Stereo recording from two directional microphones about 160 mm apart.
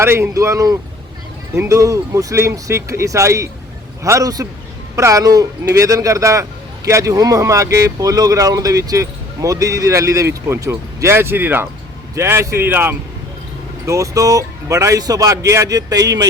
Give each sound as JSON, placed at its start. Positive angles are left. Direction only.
{"t": 0.0, "sound": "speech", "side_deg": -15}